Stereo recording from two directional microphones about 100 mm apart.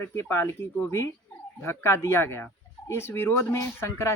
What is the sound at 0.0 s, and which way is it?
Speech, 25° left (ahead or behind).